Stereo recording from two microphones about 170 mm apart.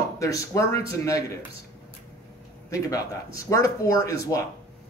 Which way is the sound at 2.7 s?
20° left (ahead or behind).